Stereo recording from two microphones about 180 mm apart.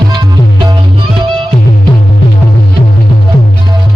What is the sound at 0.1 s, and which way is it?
Music, 25° right (ahead or behind).